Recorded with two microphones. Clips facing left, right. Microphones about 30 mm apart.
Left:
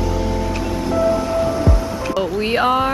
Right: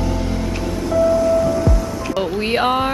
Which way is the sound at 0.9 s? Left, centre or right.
Centre.